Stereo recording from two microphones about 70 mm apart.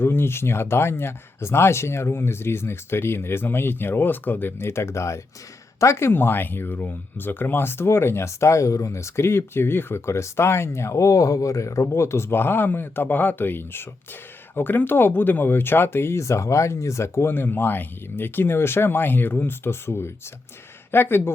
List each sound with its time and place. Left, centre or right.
0.0 s speech: left